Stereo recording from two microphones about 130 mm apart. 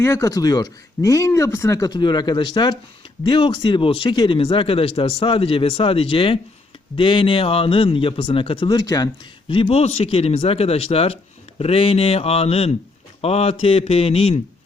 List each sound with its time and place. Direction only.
0.0 s speech: 20° left (ahead or behind)
1.9 s speech: 35° left (ahead or behind)